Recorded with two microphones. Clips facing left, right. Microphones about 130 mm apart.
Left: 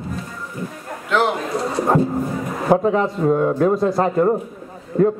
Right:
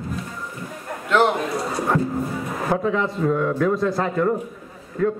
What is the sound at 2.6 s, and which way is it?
A man's voice, 30° left (ahead or behind).